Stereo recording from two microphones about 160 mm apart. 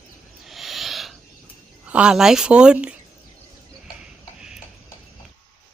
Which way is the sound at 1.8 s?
5° right (ahead or behind).